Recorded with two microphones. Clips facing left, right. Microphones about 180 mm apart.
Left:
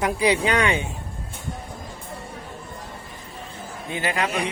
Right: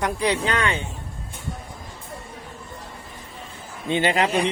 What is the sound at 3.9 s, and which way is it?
Speech, 25° right (ahead or behind).